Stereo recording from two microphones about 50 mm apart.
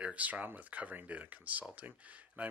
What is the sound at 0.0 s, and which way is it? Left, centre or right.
Speech, right.